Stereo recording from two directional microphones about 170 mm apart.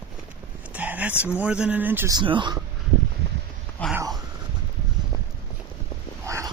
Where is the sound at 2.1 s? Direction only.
30° right (ahead or behind).